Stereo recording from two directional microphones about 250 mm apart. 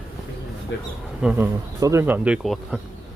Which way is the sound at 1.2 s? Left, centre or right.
Centre.